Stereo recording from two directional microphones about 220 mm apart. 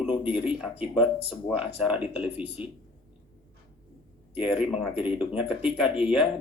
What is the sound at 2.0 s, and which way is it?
Speech, 25° left (ahead or behind).